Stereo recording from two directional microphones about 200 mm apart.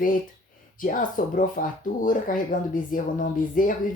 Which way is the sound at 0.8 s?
45° left (ahead or behind).